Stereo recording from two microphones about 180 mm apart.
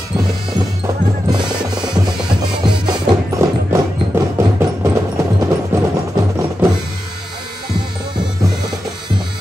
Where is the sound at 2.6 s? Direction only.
25° right (ahead or behind).